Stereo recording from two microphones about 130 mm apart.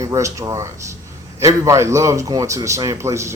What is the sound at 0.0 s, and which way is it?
A man's voice, 25° right (ahead or behind).